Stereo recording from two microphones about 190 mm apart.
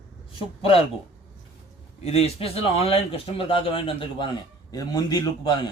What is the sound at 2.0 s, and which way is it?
A man's voice, 35° left (ahead or behind).